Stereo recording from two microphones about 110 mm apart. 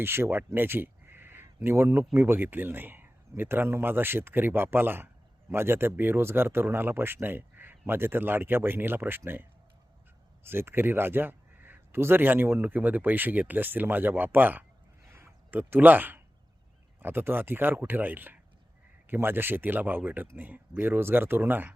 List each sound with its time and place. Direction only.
0.0 s speech: 20° right (ahead or behind)
15.0 s a sound: 25° right (ahead or behind)
17.0 s speech: 20° right (ahead or behind)